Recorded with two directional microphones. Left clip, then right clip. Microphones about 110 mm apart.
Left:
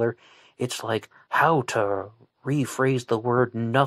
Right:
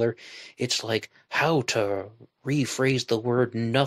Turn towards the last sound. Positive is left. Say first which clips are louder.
# left 2 dB
turn(degrees=-30)  # may be behind; listen again after turning